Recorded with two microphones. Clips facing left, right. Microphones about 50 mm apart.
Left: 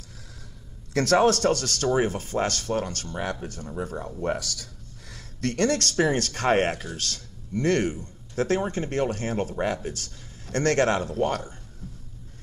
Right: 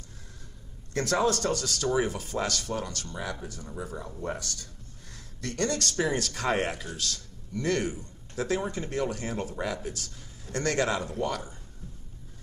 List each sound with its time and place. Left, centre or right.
0.9 s speech: left
4.2 s speech: left
5.1 s speech: left